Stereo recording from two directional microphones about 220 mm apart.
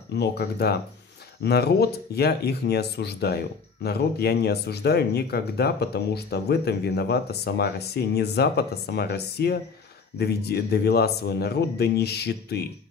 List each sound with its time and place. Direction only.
0.1 s speech: 45° left (ahead or behind)